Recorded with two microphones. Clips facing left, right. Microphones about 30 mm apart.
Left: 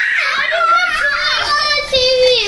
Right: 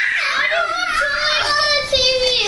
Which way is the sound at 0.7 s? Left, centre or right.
Left.